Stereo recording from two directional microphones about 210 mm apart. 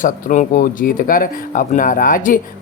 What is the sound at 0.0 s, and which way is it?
Speech, 40° left (ahead or behind).